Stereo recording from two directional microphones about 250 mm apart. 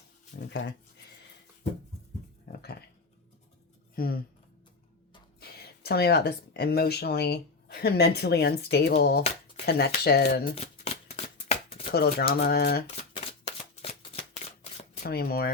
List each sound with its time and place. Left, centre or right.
0.3 s a sound: left
2.5 s speech: left
3.9 s speech: left
5.4 s speech: left
10.5 s shuffling cards: left
12.3 s speech: left
13.1 s shuffling cards: left
15.0 s speech: left